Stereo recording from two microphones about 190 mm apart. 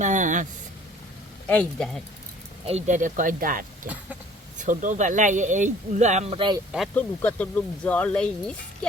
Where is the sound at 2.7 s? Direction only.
35° right (ahead or behind).